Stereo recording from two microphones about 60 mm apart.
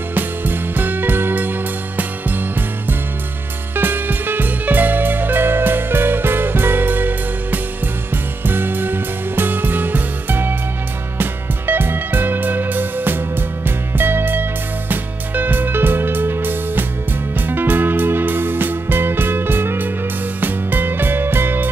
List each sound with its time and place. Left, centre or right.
0.1 s music: right
3.7 s music: right